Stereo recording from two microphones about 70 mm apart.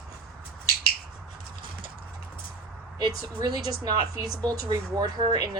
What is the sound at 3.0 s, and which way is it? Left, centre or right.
A woman's voice, right.